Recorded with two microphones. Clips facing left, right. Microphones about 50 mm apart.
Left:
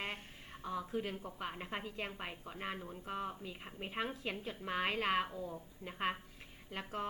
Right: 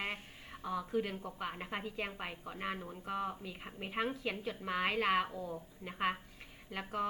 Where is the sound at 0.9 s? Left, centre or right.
Centre.